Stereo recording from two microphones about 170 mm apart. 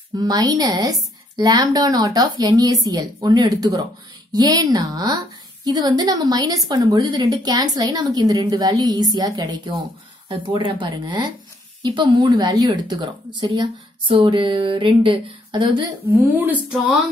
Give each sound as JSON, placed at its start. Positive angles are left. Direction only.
{"t": 0.1, "sound": "speech", "side_deg": -25}
{"t": 16.1, "sound": "speech", "side_deg": -10}